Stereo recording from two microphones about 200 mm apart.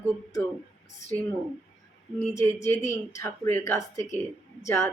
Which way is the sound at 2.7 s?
15° left (ahead or behind).